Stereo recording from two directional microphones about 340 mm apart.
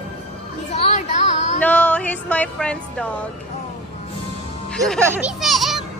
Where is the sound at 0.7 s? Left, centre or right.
Centre.